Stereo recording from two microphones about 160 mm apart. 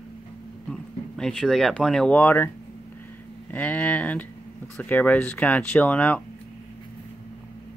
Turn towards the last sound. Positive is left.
turn(degrees=10)  # may be behind; listen again after turning